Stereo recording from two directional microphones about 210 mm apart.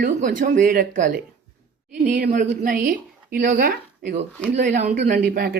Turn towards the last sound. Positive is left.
turn(degrees=-45)  # may be behind; listen again after turning